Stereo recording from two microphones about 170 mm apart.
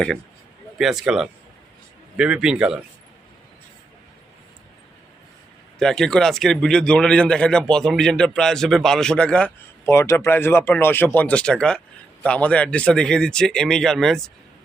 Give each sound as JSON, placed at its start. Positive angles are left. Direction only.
{"t": 0.8, "sound": "speech", "side_deg": 0}
{"t": 5.8, "sound": "speech", "side_deg": 5}